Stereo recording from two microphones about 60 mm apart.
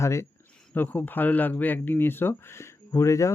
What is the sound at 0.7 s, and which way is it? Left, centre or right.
Speech, left.